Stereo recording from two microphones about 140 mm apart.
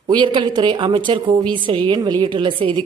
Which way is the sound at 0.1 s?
35° right (ahead or behind).